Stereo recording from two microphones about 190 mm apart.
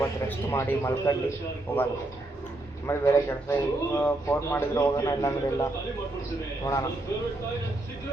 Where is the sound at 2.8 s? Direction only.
15° left (ahead or behind).